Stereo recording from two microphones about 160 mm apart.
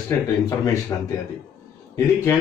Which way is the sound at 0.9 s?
20° left (ahead or behind).